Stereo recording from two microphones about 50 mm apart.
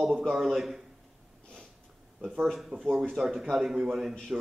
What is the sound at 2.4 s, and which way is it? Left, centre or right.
A man's voice, centre.